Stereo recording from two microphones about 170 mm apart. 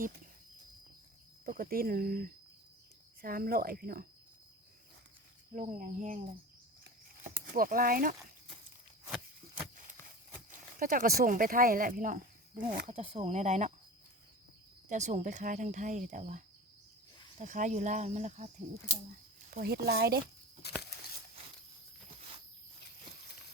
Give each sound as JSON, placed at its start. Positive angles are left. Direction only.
{"t": 1.5, "sound": "speech", "side_deg": -60}
{"t": 5.7, "sound": "speech", "side_deg": -50}
{"t": 7.3, "sound": "speech", "side_deg": -55}
{"t": 10.8, "sound": "speech", "side_deg": -55}
{"t": 12.9, "sound": "speech", "side_deg": -35}
{"t": 14.8, "sound": "speech", "side_deg": -45}
{"t": 17.4, "sound": "speech", "side_deg": -45}
{"t": 19.5, "sound": "speech", "side_deg": -65}
{"t": 20.6, "sound": "a sound", "side_deg": 75}